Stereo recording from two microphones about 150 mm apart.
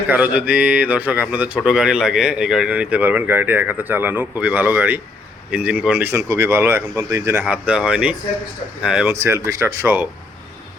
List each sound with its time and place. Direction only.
0.1 s speech: 10° right (ahead or behind)
7.4 s speech: 10° right (ahead or behind)
9.0 s speech: 20° right (ahead or behind)